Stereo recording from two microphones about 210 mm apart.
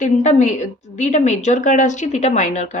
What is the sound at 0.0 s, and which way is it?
Speech, 35° left (ahead or behind).